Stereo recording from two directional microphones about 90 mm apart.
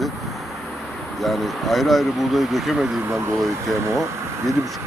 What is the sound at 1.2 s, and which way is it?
Speech, centre (ahead or behind).